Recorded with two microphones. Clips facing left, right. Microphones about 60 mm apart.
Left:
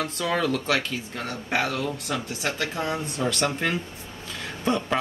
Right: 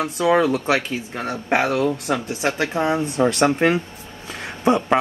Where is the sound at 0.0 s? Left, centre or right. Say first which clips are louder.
Right 8 dB; centre.